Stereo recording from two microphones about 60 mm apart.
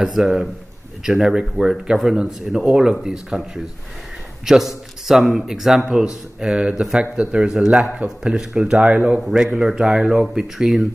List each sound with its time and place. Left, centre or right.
0.0 s speech: centre
9.2 s speech: centre